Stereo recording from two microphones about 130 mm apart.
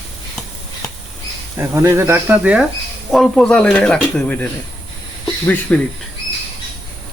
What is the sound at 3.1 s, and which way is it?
Speech, 5° left (ahead or behind).